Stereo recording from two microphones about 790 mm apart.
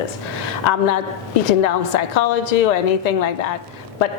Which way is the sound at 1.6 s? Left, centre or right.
Left.